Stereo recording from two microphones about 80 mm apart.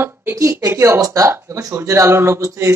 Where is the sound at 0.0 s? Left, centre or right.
Right.